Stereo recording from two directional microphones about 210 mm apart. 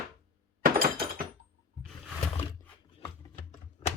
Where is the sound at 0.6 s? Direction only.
45° right (ahead or behind).